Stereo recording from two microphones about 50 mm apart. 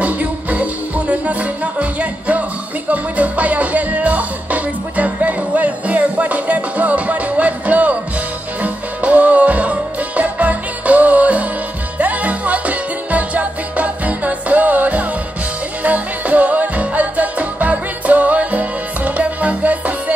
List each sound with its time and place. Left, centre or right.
0.0 s music: right